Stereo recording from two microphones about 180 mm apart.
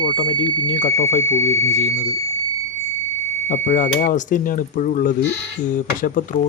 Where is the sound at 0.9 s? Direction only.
90° left.